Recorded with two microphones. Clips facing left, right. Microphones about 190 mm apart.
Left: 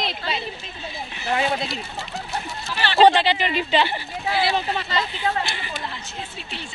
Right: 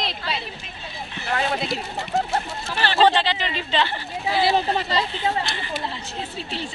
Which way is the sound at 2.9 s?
15° left (ahead or behind).